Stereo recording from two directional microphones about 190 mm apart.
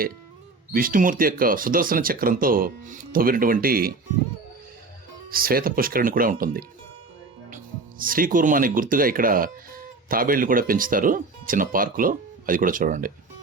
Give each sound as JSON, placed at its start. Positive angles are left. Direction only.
{"t": 0.7, "sound": "speech", "side_deg": -50}
{"t": 5.3, "sound": "speech", "side_deg": -50}